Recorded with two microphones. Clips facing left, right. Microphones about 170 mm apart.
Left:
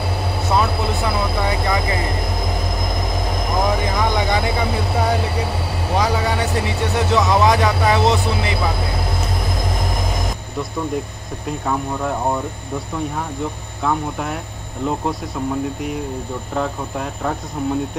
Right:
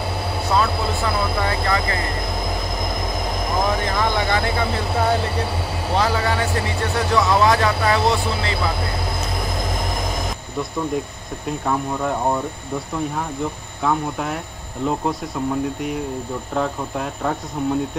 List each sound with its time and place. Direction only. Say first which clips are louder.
1.4 s vehicle: left 1 dB; 15° left (ahead or behind)
3.8 s vehicle: left 1 dB; 15° left (ahead or behind)
5.9 s vehicle: left 1 dB; 15° left (ahead or behind)
7.0 s speech: left 1 dB; 20° left (ahead or behind)
11.4 s speech: even; centre (ahead or behind)